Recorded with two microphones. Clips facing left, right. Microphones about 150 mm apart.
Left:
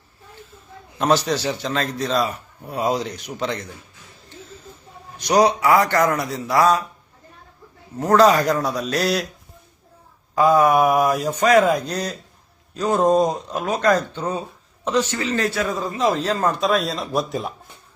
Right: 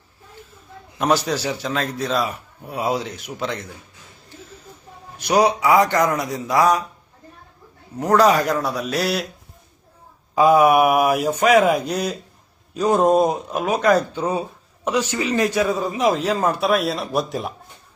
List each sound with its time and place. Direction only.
0.9 s a man's voice: 10° right (ahead or behind)
5.1 s a man's voice: 10° right (ahead or behind)
7.9 s a man's voice: 10° right (ahead or behind)
10.3 s a man's voice: 10° right (ahead or behind)